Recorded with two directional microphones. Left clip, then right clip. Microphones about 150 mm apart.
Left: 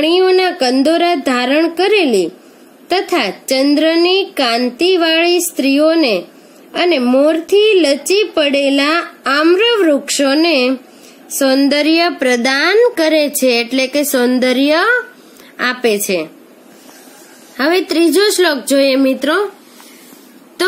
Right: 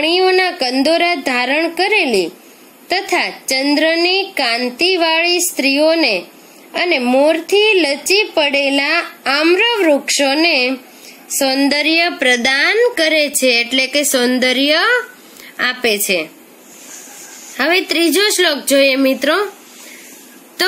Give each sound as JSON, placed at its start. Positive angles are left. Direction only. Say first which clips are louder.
{"t": 0.0, "sound": "a woman's voice", "louder": "left 2 dB", "side_deg": 40}
{"t": 2.0, "sound": "a woman's voice", "louder": "left 2 dB", "side_deg": -10}
{"t": 2.9, "sound": "a woman's voice", "louder": "left 2 dB", "side_deg": 40}
{"t": 17.8, "sound": "a woman's voice", "louder": "left 2 dB", "side_deg": 25}